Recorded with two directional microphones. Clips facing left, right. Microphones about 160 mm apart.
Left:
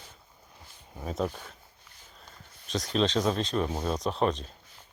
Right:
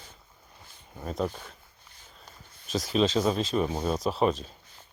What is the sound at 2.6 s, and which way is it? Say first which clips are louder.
Speech: right 2 dB; 5° right (ahead or behind).